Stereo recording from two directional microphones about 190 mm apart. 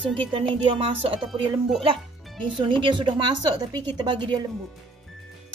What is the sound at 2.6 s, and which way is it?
A woman's voice, 25° right (ahead or behind).